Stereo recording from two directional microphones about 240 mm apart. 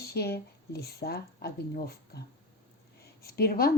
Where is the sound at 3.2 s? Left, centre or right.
Left.